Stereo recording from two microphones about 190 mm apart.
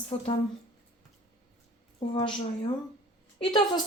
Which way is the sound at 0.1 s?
30° left (ahead or behind).